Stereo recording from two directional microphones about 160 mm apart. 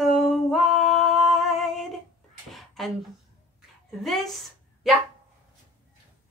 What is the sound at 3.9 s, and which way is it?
Speech, centre (ahead or behind).